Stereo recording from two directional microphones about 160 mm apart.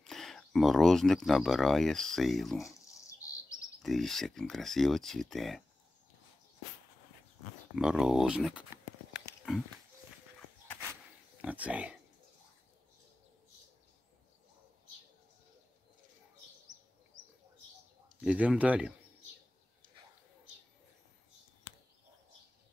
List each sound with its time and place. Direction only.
0.0 s speech: centre (ahead or behind)
2.9 s bird: 20° left (ahead or behind)
3.8 s speech: centre (ahead or behind)
7.7 s speech: 5° right (ahead or behind)
11.4 s speech: 10° right (ahead or behind)
18.2 s speech: 5° right (ahead or behind)